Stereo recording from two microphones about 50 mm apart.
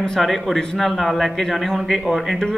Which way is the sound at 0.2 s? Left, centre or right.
Centre.